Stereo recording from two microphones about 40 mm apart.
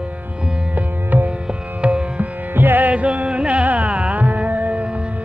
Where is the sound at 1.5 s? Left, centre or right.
Right.